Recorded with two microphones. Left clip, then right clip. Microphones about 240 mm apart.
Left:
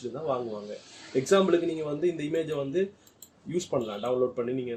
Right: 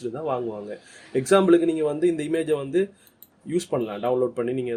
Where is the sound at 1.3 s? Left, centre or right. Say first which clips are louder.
Right 6 dB; right.